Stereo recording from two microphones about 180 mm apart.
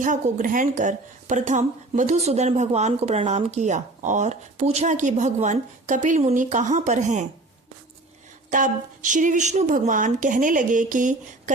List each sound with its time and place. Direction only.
0.0 s speech: 45° right (ahead or behind)
8.4 s speech: 45° right (ahead or behind)